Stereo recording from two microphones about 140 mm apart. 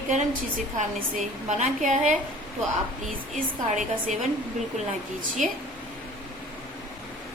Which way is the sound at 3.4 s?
60° right (ahead or behind).